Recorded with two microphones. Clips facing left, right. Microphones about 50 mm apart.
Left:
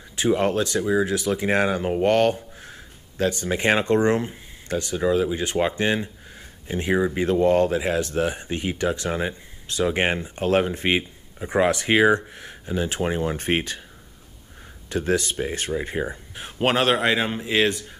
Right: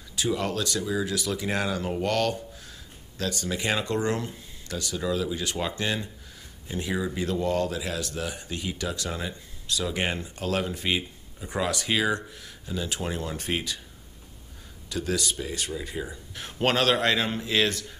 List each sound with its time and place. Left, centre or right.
0.1 s speech: left
14.9 s speech: left
16.3 s a man's voice: centre